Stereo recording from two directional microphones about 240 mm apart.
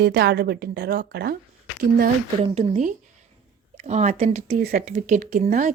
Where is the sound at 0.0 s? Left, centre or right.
Right.